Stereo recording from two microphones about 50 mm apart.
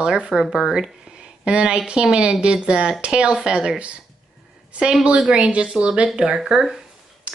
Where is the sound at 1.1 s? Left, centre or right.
Right.